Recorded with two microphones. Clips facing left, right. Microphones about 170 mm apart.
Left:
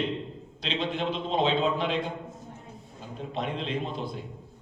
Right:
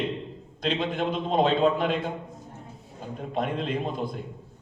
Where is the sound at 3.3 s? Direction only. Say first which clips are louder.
Right 3 dB; 50° right (ahead or behind).